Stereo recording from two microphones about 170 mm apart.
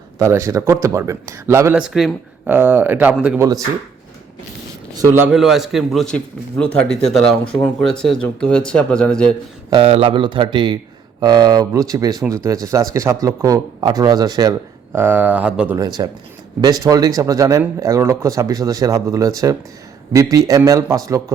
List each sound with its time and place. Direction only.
0.2 s speech: 15° right (ahead or behind)
1.8 s speech: centre (ahead or behind)
4.9 s a man's voice: 15° right (ahead or behind)
5.3 s a man's voice: centre (ahead or behind)
9.6 s speech: 30° right (ahead or behind)
14.9 s speech: 10° right (ahead or behind)
15.8 s speech: 25° right (ahead or behind)